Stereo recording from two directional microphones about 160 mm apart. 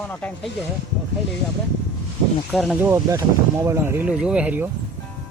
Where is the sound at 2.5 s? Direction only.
Centre (ahead or behind).